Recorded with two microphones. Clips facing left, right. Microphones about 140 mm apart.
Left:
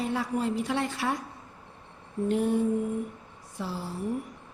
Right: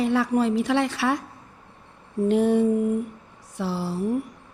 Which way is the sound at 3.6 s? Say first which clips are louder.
Right 7 dB; 80° right.